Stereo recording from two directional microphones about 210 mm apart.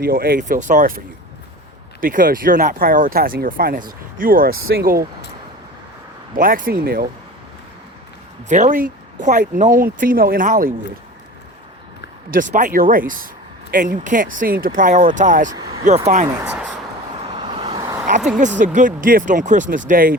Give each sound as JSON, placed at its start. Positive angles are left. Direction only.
{"t": 0.0, "sound": "speech", "side_deg": -45}
{"t": 6.3, "sound": "speech", "side_deg": -40}
{"t": 8.4, "sound": "speech", "side_deg": -35}
{"t": 12.3, "sound": "speech", "side_deg": -40}
{"t": 15.5, "sound": "speech", "side_deg": -20}
{"t": 16.0, "sound": "speech", "side_deg": -30}
{"t": 16.4, "sound": "speech", "side_deg": -5}
{"t": 17.2, "sound": "vehicle", "side_deg": -20}
{"t": 18.3, "sound": "speech", "side_deg": -35}